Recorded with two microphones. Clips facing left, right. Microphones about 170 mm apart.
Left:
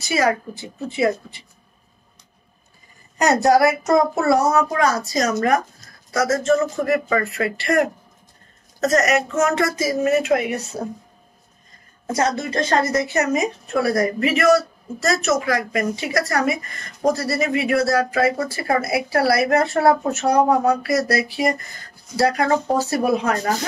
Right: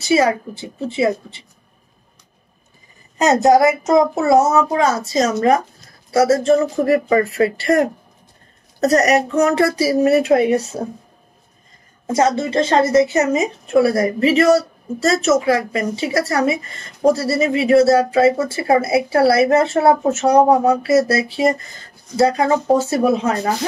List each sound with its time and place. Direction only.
0.0 s a woman's voice: 25° right (ahead or behind)
3.2 s a woman's voice: 20° right (ahead or behind)
12.1 s a woman's voice: 25° right (ahead or behind)